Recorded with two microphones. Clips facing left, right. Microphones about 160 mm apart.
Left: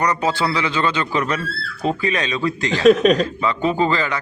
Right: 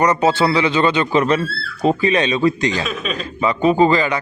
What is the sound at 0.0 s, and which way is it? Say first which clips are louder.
Speech: right 5 dB; 20° right (ahead or behind).